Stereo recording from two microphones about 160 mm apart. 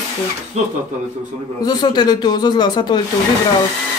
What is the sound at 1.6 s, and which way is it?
Speech, 25° left (ahead or behind).